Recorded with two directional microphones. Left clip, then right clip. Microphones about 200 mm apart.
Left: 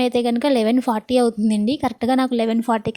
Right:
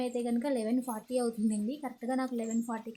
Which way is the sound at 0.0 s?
45° left (ahead or behind).